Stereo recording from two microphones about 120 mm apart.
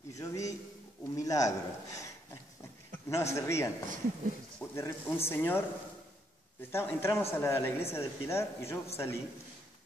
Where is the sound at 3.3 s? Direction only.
25° left (ahead or behind).